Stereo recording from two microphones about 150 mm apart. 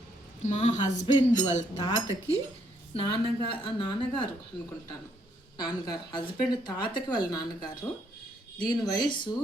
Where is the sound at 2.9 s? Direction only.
35° left (ahead or behind).